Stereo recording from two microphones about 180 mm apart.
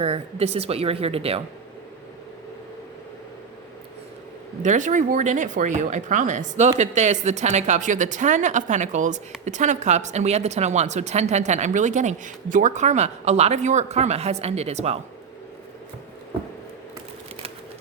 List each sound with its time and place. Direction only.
0.0 s a woman's voice: 35° right (ahead or behind)
4.6 s a woman's voice: 45° right (ahead or behind)